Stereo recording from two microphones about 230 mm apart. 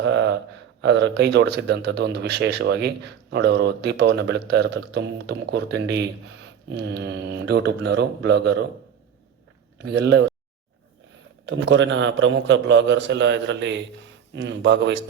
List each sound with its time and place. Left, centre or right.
0.0 s a sound: right
0.8 s a man's voice: right
9.7 s speech: right
11.4 s a man's voice: right